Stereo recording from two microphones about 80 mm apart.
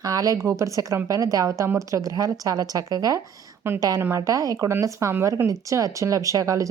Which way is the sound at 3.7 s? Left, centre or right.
Right.